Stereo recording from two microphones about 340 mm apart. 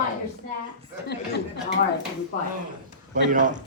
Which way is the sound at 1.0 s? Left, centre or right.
Left.